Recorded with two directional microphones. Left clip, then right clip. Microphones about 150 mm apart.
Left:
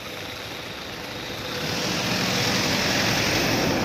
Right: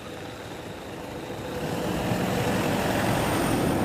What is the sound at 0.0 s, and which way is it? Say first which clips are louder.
Vehicle: left 4 dB; 85° right.